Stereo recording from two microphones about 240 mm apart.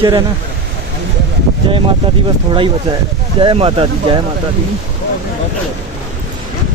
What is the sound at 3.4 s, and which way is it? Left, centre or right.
Speech, right.